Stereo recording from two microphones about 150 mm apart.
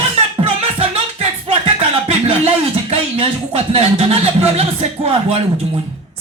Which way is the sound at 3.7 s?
40° right (ahead or behind).